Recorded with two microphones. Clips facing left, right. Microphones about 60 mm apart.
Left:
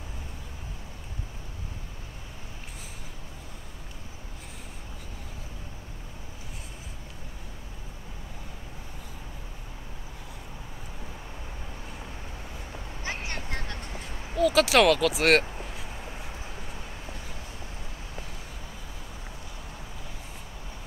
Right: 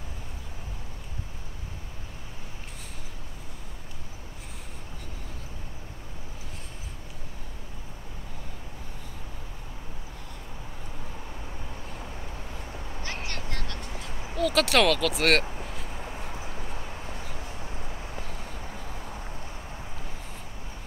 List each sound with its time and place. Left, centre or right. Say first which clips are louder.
13.0 s a sound: left 2 dB; centre
14.3 s speech: left 2 dB; centre
15.4 s vehicle: right 1 dB; centre